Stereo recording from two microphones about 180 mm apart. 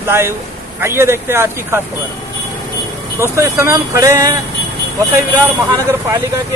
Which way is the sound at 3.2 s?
15° right (ahead or behind).